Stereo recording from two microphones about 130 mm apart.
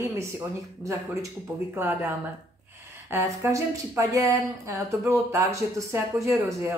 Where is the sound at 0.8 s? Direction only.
25° right (ahead or behind).